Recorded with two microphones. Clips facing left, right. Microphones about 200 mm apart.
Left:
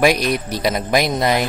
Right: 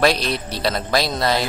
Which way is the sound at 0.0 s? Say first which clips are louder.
Left 3 dB; 15° left (ahead or behind).